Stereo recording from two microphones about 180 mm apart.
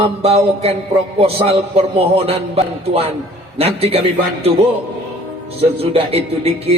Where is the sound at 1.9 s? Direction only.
35° right (ahead or behind).